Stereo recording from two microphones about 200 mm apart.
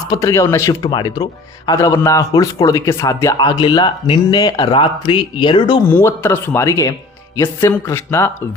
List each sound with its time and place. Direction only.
0.1 s speech: 15° left (ahead or behind)
5.9 s speech: 15° left (ahead or behind)